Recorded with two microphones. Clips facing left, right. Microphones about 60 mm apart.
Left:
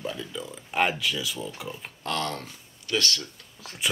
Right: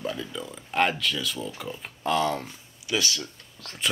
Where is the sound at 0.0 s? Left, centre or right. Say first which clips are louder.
Right 1 dB; centre.